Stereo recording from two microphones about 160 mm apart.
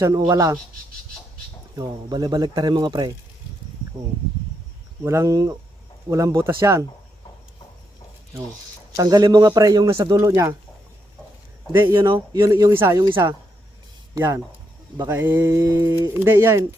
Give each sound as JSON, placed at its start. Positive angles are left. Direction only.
{"t": 0.0, "sound": "a man's voice", "side_deg": -20}
{"t": 1.7, "sound": "a man's voice", "side_deg": -25}
{"t": 5.0, "sound": "a man's voice", "side_deg": -20}
{"t": 9.0, "sound": "a man's voice", "side_deg": -25}
{"t": 11.7, "sound": "speech", "side_deg": -15}
{"t": 14.2, "sound": "a man's voice", "side_deg": -20}